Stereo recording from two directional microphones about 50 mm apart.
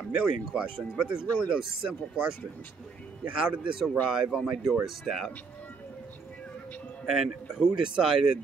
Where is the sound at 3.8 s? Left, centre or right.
Centre.